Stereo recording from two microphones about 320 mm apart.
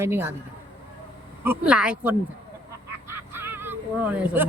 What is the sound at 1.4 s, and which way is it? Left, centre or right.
Speech, centre.